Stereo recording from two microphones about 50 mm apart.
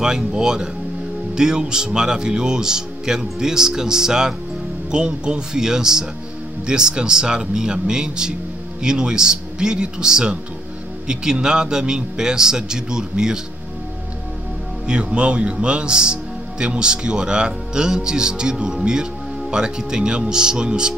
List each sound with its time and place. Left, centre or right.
0.0 s speech: centre
14.9 s speech: right